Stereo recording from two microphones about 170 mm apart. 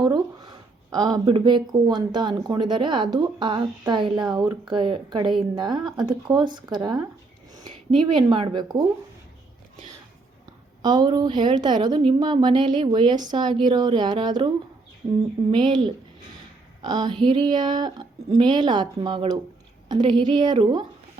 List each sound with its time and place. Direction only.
0.0 s a sound: 25° right (ahead or behind)
0.9 s a woman's voice: 20° right (ahead or behind)
10.4 s a woman's voice: 25° right (ahead or behind)